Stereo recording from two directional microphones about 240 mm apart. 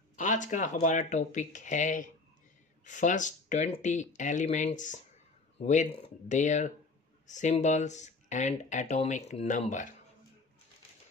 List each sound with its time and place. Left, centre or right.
0.1 s speech: left